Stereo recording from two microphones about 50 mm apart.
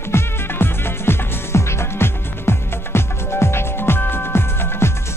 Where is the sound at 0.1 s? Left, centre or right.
Left.